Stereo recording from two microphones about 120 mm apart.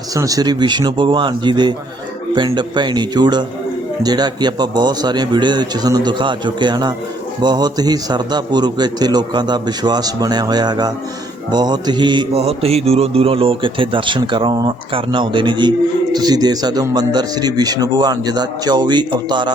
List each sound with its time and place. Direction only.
0.1 s a man's voice: 30° right (ahead or behind)
12.3 s a man's voice: 55° right (ahead or behind); by 19.5 s 40° right (ahead or behind)